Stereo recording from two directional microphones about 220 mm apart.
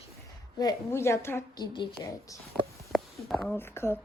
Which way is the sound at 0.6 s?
15° left (ahead or behind).